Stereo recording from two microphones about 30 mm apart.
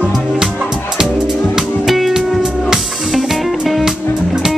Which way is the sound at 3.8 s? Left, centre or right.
Centre.